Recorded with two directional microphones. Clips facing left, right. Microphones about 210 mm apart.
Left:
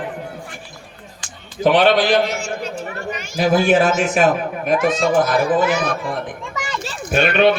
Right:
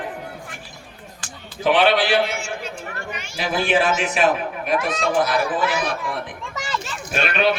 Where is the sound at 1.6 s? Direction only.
40° left (ahead or behind).